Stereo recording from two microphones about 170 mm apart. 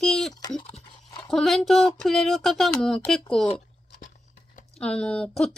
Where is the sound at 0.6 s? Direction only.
30° left (ahead or behind).